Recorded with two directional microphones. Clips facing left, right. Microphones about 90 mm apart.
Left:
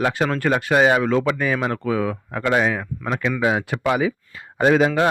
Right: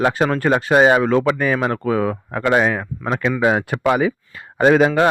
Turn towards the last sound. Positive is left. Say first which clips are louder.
# right 3 dB
turn(degrees=-55)  # may be behind; listen again after turning